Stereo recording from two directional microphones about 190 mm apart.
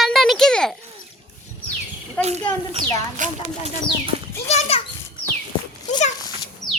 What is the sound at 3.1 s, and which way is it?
Speech, 40° right (ahead or behind).